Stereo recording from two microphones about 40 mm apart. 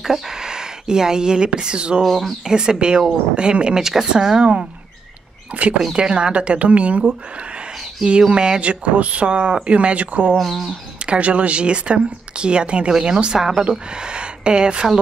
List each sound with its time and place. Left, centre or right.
0.0 s speech: centre
2.0 s speech: centre
2.4 s speech: centre
5.5 s speech: right
5.9 s speech: right
8.3 s speech: right
10.4 s speech: centre
11.1 s speech: right